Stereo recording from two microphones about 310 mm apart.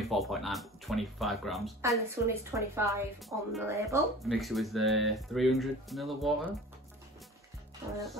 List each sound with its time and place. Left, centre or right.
0.0 s speech: centre